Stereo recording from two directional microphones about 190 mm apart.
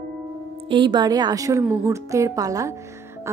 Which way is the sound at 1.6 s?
10° right (ahead or behind).